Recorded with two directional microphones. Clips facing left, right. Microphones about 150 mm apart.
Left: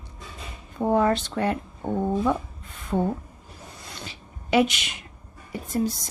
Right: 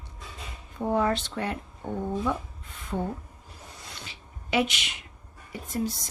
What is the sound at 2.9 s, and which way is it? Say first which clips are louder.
Speech: left 6 dB; 70° left (ahead or behind).